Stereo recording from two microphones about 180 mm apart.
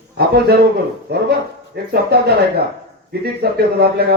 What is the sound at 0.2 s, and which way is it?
Speech, 60° right (ahead or behind).